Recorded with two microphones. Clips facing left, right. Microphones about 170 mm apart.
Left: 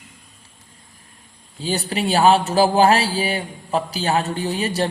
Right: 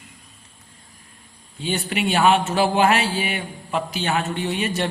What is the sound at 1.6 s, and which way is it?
Speech, 35° left (ahead or behind).